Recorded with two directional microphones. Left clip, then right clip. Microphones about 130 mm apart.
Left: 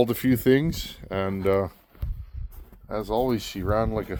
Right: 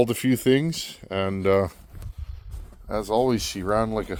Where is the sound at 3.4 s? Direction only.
90° right; by 4.1 s 65° right (ahead or behind).